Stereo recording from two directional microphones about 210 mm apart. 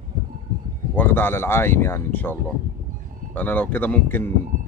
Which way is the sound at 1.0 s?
10° left (ahead or behind).